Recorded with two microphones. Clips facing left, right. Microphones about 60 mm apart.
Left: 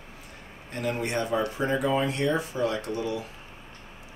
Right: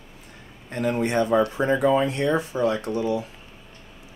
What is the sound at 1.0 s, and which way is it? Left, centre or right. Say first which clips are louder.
Speech: right 8 dB; right.